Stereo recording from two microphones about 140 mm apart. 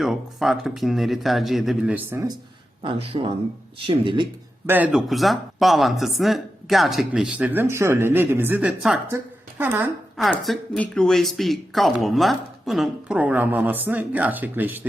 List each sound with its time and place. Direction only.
0.0 s speech: centre (ahead or behind)
2.0 s a man's voice: 15° right (ahead or behind)
2.8 s speech: 40° right (ahead or behind)
4.6 s a man's voice: 15° right (ahead or behind)
4.9 s speech: centre (ahead or behind)
10.4 s speech: 5° left (ahead or behind); by 14.8 s 15° right (ahead or behind)